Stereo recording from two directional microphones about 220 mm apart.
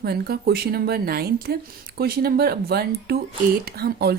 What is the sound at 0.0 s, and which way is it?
Speech, 45° right (ahead or behind).